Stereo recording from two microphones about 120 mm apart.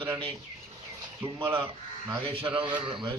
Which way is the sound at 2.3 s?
45° right (ahead or behind).